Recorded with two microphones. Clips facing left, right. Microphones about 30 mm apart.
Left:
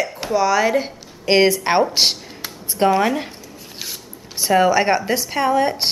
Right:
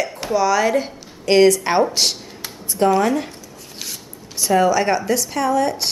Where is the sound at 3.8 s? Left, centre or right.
Centre.